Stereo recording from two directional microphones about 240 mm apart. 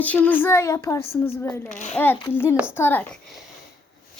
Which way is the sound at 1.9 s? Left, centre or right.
Centre.